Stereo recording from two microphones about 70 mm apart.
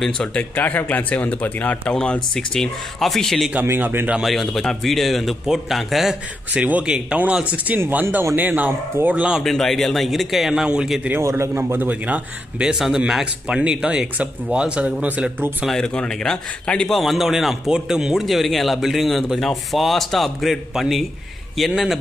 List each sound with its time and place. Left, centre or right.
0.0 s speech: centre
0.4 s speech: left
2.0 s speech: centre
3.6 s speech: right
4.2 s a man's voice: centre
6.5 s speech: centre
9.4 s a man's voice: centre
11.2 s a man's voice: right; by 12.7 s centre
12.7 s a man's voice: centre; by 15.3 s right
15.8 s speech: centre
16.9 s a man's voice: centre